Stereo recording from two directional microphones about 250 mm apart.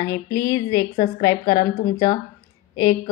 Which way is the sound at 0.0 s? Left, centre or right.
Centre.